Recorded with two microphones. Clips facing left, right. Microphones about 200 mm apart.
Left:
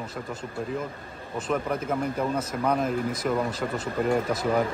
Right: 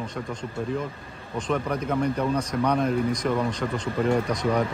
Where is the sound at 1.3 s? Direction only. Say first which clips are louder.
Right 1 dB; 5° left (ahead or behind).